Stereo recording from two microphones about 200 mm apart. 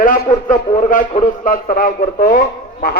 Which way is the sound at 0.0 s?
40° left (ahead or behind).